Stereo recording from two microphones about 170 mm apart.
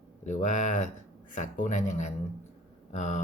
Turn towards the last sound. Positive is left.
turn(degrees=45)  # may be behind; listen again after turning